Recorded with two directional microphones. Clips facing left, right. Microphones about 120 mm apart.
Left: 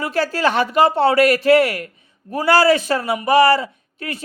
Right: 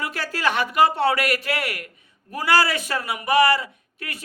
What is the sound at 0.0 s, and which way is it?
A man's voice, 30° left (ahead or behind).